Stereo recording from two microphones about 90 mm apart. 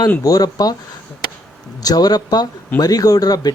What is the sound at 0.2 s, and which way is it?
Speech, 40° left (ahead or behind).